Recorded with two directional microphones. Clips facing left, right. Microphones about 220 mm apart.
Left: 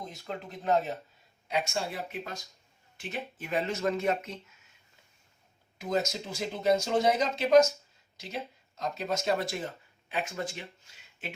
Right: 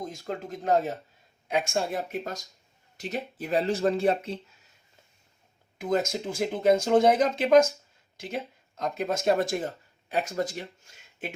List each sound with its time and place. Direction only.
0.0 s speech: 45° right (ahead or behind)
5.8 s speech: 50° right (ahead or behind)